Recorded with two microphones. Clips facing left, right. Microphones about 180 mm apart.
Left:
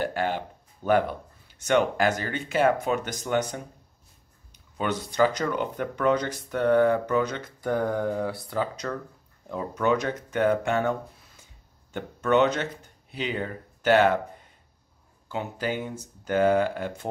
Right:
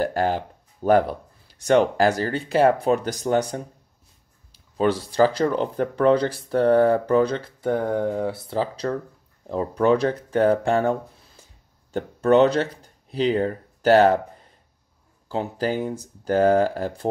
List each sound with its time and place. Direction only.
0.0 s speech: 40° right (ahead or behind)
15.2 s speech: 35° right (ahead or behind)